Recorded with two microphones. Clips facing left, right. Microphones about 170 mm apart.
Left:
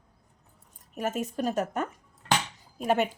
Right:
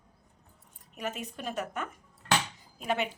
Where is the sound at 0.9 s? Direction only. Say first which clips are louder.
Left 7 dB; 45° left (ahead or behind).